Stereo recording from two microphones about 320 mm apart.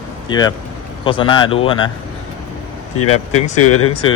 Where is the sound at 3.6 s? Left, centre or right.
Left.